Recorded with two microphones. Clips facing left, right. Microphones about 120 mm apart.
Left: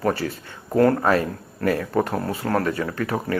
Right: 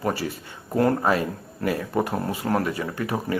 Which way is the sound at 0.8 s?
20° right (ahead or behind).